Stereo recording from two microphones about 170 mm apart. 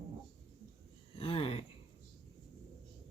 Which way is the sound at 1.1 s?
35° left (ahead or behind).